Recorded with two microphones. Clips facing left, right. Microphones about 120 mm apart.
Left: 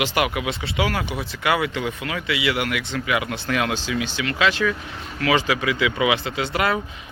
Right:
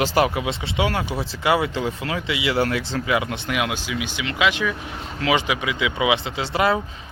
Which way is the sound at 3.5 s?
10° right (ahead or behind).